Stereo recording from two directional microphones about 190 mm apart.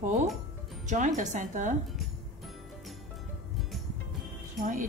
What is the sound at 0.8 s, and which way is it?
Speech, 40° right (ahead or behind).